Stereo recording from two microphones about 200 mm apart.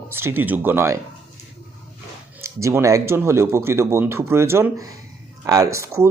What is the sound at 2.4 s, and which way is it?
Speech, 15° right (ahead or behind).